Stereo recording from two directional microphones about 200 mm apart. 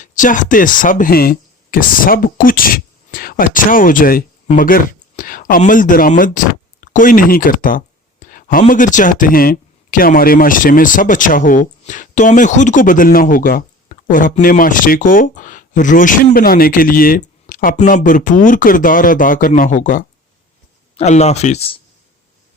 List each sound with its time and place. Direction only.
0.0 s a man's voice: 40° left (ahead or behind)